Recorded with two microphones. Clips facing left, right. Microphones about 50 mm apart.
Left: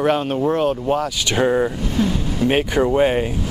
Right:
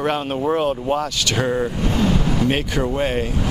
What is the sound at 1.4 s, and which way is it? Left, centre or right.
Speech, centre.